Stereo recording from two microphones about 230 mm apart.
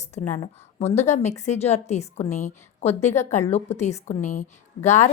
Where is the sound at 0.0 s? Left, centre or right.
Left.